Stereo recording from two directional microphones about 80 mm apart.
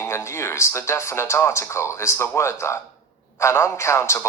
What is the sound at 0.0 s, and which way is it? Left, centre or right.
A woman's voice, left.